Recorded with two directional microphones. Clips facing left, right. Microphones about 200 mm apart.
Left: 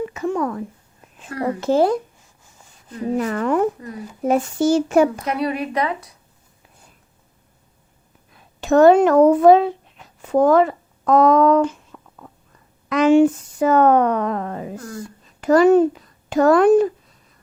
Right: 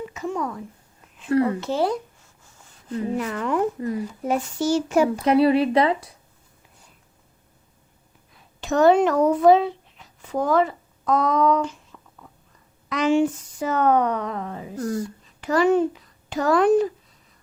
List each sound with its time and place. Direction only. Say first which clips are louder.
0.1 s a sound: left 5 dB; 60° left (ahead or behind)
1.3 s a woman's voice: right 8 dB; 30° right (ahead or behind)
1.6 s a child's voice: left 6 dB; 50° left (ahead or behind)
3.2 s a child's voice: left 7 dB; 50° left (ahead or behind)
3.8 s a woman's voice: right 8 dB; 25° right (ahead or behind)
4.2 s a child's voice: left 8 dB; 50° left (ahead or behind)
5.2 s a woman's voice: right 6 dB; 30° right (ahead or behind)
8.6 s speech: left 5 dB; 50° left (ahead or behind)
14.8 s a woman's voice: right 7 dB; 30° right (ahead or behind)
15.4 s a child's voice: left 6 dB; 45° left (ahead or behind)